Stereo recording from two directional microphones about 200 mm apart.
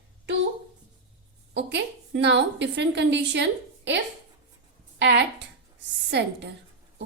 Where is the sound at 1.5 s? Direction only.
60° right (ahead or behind).